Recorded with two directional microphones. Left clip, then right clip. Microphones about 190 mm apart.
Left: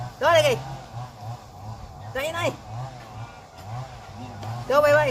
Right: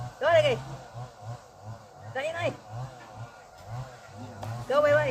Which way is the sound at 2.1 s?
65° left (ahead or behind).